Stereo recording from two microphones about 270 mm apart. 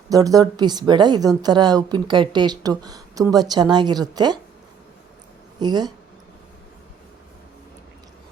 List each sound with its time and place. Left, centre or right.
0.1 s speech: centre
5.5 s speech: centre